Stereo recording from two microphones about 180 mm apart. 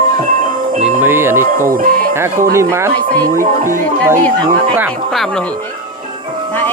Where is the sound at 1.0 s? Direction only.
15° right (ahead or behind).